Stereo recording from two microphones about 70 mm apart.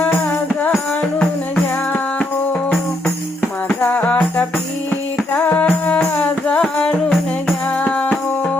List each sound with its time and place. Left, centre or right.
1.9 s music: left
3.8 s music: left